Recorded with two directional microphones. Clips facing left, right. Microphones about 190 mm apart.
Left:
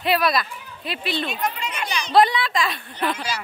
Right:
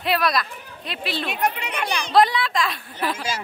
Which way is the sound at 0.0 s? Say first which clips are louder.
Left 1 dB; centre (ahead or behind).